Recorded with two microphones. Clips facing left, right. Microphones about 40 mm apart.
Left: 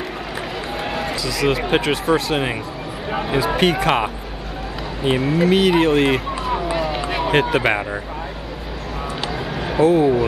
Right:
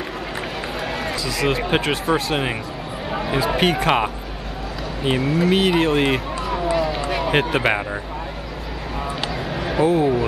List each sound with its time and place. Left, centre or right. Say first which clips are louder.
0.9 s speech: left 2 dB; centre
9.6 s speech: left 3 dB; centre